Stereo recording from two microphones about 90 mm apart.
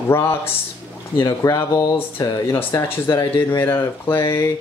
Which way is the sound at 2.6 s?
25° left (ahead or behind).